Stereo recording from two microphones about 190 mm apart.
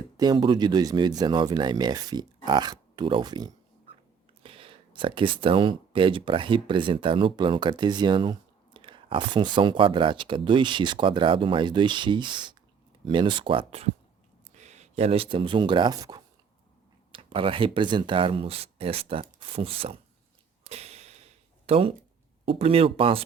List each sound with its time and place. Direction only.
0.2 s speech: 20° right (ahead or behind)
20.7 s a sound: 35° right (ahead or behind)
21.7 s speech: 30° right (ahead or behind)